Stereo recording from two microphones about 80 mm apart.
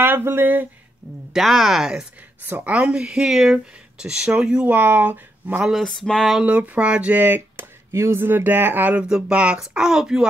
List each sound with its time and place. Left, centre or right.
0.0 s speech: right
1.3 s speech: centre
2.5 s speech: centre
5.8 s speech: centre
6.4 s speech: centre
9.0 s speech: centre